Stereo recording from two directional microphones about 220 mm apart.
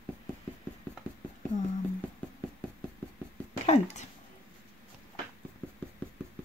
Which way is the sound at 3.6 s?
30° left (ahead or behind).